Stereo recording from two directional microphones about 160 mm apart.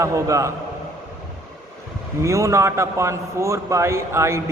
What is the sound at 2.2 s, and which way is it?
A man's voice, 20° right (ahead or behind).